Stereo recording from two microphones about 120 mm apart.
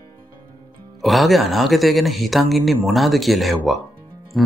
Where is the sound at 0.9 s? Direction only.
Centre (ahead or behind).